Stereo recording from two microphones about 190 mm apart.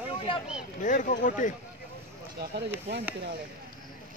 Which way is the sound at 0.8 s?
40° left (ahead or behind).